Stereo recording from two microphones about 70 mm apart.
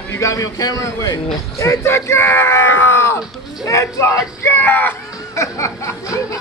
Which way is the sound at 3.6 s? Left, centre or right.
Left.